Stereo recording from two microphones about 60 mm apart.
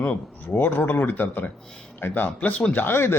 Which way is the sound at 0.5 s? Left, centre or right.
Left.